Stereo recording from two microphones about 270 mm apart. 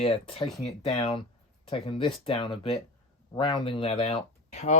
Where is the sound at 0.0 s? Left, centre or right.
Left.